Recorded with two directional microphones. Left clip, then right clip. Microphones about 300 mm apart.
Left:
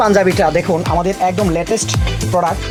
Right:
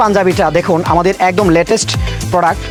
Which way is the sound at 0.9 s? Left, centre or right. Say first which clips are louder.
Right 5 dB; right.